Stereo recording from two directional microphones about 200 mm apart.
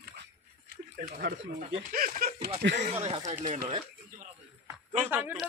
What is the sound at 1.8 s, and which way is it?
Speech, 45° right (ahead or behind).